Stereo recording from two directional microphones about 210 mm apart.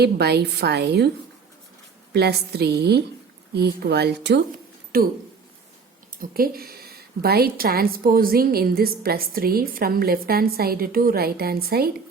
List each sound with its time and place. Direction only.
0.0 s a woman's voice: 50° right (ahead or behind)
2.1 s a woman's voice: 50° right (ahead or behind)
4.5 s a sound: 45° right (ahead or behind)
6.1 s a woman's voice: 45° right (ahead or behind)